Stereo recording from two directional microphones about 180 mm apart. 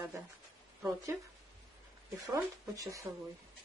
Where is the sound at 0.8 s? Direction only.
20° right (ahead or behind).